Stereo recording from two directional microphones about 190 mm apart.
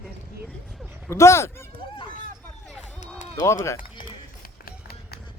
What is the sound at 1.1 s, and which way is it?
Speech, 15° left (ahead or behind).